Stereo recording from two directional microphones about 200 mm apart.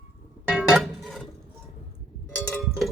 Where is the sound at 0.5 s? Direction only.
Centre (ahead or behind).